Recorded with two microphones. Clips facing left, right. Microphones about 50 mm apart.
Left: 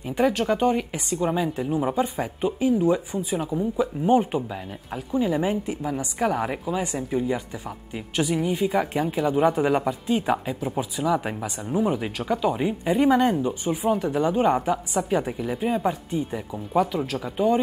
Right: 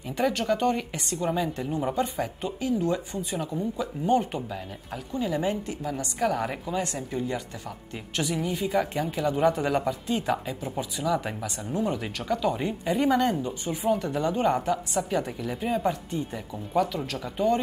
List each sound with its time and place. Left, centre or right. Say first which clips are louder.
0.0 s speech: left 4 dB; centre
13.9 s speech: left 4 dB; centre